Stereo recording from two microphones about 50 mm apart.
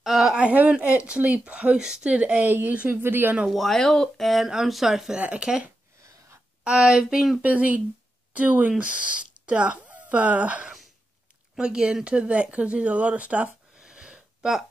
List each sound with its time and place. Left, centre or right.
0.0 s a sound: centre
0.4 s speech: right
2.4 s a woman's voice: right
3.4 s speech: centre
5.4 s speech: centre
6.8 s speech: centre
7.4 s speech: right
8.7 s speech: right
11.5 s speech: centre